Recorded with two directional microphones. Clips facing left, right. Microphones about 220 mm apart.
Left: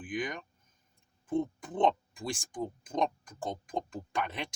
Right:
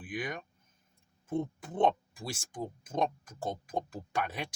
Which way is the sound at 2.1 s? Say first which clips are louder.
Left 3 dB; 5° right (ahead or behind).